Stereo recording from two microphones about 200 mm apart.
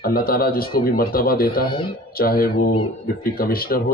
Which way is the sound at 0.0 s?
50° left (ahead or behind).